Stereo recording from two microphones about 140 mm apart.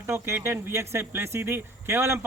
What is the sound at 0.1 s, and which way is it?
Speech, 20° right (ahead or behind).